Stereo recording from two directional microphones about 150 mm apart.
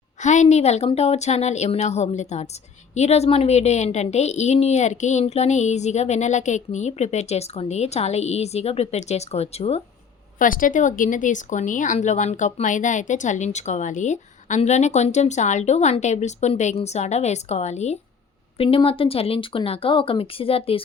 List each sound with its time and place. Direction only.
0.2 s speech: 50° left (ahead or behind)
10.3 s speech: 65° left (ahead or behind)
18.5 s speech: 40° left (ahead or behind)